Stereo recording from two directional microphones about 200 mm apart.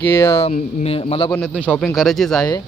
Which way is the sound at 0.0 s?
15° left (ahead or behind).